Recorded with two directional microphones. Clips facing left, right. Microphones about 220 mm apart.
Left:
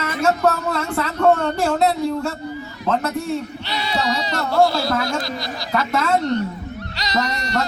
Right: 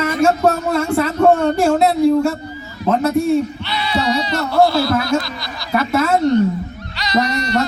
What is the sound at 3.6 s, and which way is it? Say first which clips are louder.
Speech: right 3 dB; 40° left (ahead or behind).